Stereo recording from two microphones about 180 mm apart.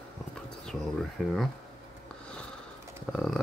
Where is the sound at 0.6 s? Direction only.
5° left (ahead or behind).